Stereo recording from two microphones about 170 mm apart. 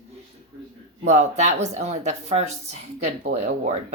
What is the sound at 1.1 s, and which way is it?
A woman's voice, 40° right (ahead or behind).